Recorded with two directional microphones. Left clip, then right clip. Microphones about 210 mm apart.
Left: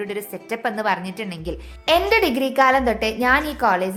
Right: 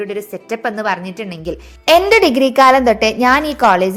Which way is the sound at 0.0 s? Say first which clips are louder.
Right 5 dB; 15° right (ahead or behind).